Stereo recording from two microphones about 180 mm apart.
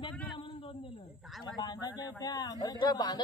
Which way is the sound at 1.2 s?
Centre (ahead or behind).